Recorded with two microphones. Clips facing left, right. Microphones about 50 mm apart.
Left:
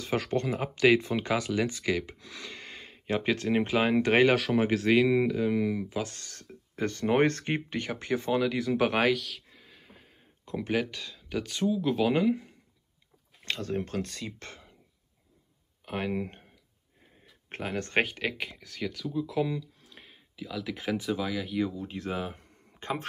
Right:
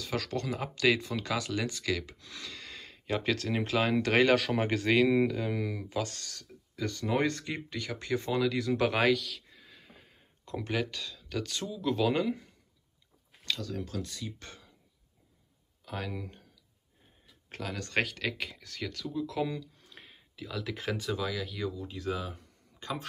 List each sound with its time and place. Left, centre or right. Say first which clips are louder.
0.0 s speech: left 5 dB; left
4.4 s speech: left 4 dB; centre
6.1 s speech: right 2 dB; left
6.4 s speech: left 4 dB; left
8.2 s speech: left 2 dB; centre
10.4 s speech: left 3 dB; centre
13.5 s speech: left 4 dB; left
15.8 s speech: left 6 dB; left
21.7 s speech: left 1 dB; left